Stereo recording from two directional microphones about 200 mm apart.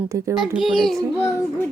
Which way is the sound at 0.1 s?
15° right (ahead or behind).